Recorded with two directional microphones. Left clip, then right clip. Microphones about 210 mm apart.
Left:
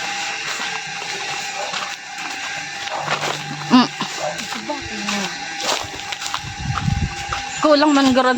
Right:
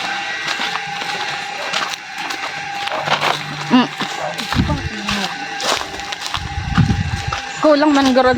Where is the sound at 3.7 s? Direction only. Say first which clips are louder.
Even; 20° left (ahead or behind).